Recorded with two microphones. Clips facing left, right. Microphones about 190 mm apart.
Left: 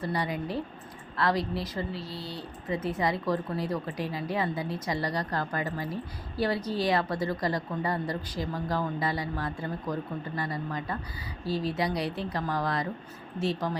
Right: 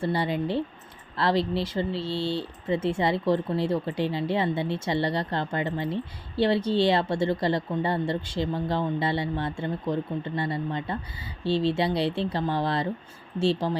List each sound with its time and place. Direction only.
0.0 s speech: 30° right (ahead or behind)